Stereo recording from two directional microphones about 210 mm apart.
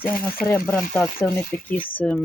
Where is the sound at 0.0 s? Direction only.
45° left (ahead or behind).